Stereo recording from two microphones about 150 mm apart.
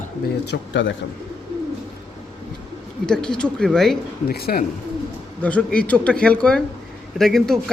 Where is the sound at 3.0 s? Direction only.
5° left (ahead or behind).